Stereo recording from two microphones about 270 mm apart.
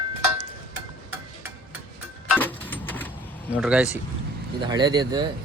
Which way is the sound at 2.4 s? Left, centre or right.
Centre.